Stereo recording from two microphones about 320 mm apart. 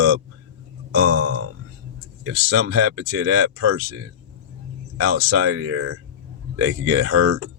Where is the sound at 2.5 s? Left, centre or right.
Right.